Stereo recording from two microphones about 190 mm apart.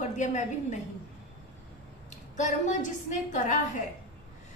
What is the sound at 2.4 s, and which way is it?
A woman's voice, 40° left (ahead or behind).